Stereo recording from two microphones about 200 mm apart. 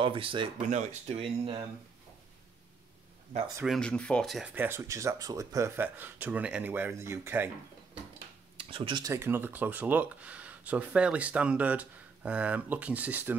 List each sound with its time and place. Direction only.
0.0 s speech: 25° right (ahead or behind)
3.6 s speech: centre (ahead or behind)
4.6 s speech: 15° right (ahead or behind)
8.5 s speech: 25° right (ahead or behind); by 13.4 s 10° right (ahead or behind)